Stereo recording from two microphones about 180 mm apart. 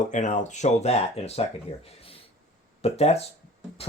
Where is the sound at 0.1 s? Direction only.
45° left (ahead or behind).